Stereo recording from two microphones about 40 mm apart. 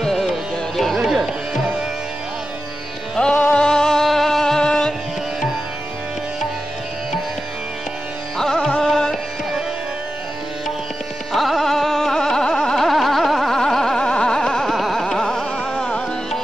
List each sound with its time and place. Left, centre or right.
0.0 s music: centre
1.0 s music: centre
3.2 s music: left
3.5 s music: centre
4.0 s music: centre
8.4 s music: centre
11.3 s carnatic music: centre; by 12.7 s left
12.7 s a sound: centre
14.7 s carnatic music: centre
15.7 s music: left